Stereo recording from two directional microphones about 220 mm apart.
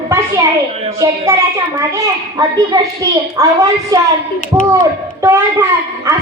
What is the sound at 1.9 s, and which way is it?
A woman's voice, 15° right (ahead or behind).